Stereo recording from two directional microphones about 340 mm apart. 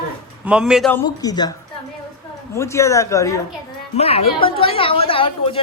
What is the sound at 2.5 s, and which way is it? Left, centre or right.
Speech, centre.